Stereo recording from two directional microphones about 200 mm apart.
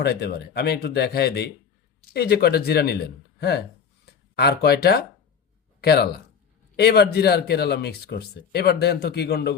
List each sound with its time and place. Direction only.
0.0 s speech: 55° left (ahead or behind)
4.0 s speech: 55° left (ahead or behind)